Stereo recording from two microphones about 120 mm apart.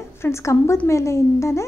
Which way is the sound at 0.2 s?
25° left (ahead or behind).